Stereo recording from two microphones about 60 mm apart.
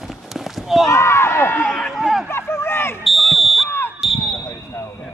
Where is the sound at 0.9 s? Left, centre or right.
Left.